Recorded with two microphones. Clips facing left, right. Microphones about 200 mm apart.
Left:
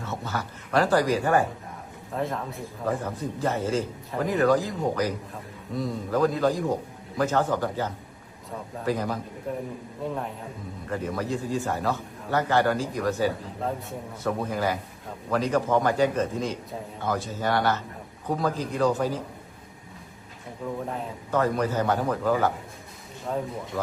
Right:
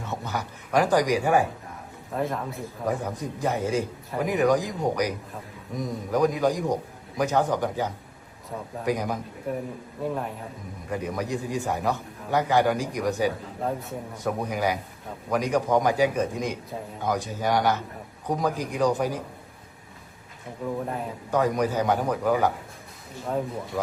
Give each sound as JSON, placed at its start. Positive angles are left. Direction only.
{"t": 0.0, "sound": "speech", "side_deg": -15}
{"t": 2.1, "sound": "a man's voice", "side_deg": 0}
{"t": 2.8, "sound": "a man's voice", "side_deg": -15}
{"t": 10.8, "sound": "a man's voice", "side_deg": -15}
{"t": 20.6, "sound": "a man's voice", "side_deg": -5}